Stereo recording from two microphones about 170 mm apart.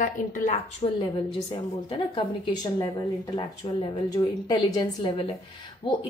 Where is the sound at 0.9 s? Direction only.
30° left (ahead or behind).